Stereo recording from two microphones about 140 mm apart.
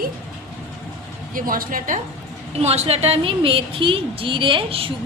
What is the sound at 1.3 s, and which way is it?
Speech, 80° right.